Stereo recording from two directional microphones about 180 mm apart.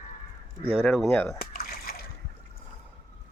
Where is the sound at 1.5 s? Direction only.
55° left (ahead or behind).